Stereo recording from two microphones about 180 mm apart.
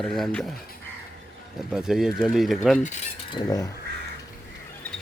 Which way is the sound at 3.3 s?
20° left (ahead or behind).